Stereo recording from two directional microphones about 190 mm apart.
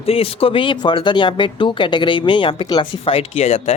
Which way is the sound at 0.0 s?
30° left (ahead or behind).